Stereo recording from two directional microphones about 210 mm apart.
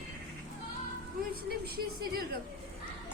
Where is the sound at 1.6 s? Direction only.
45° right (ahead or behind).